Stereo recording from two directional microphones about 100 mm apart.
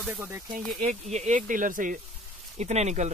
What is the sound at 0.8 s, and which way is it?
Speech, 90° right.